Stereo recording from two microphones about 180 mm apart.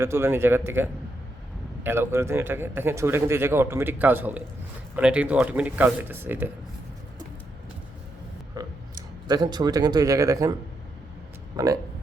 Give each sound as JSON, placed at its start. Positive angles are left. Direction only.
{"t": 0.0, "sound": "a man's voice", "side_deg": -15}
{"t": 8.6, "sound": "a sound", "side_deg": -15}
{"t": 9.2, "sound": "a man's voice", "side_deg": -25}
{"t": 11.5, "sound": "a man's voice", "side_deg": -20}